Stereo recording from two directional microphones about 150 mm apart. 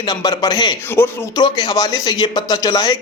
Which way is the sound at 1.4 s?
30° left (ahead or behind).